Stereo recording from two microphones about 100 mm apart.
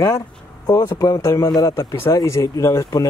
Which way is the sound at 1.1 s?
30° left (ahead or behind).